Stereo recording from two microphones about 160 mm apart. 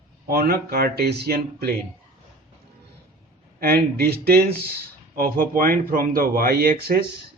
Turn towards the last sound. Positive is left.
turn(degrees=-75)  # may be behind; listen again after turning